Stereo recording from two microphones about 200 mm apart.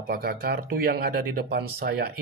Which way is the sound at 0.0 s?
50° right (ahead or behind).